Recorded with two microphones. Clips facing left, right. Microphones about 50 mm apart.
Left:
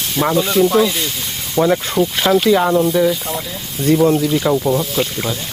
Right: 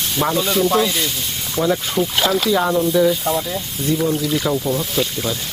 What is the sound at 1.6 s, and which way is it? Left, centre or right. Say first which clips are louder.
Speech: left 4 dB; left.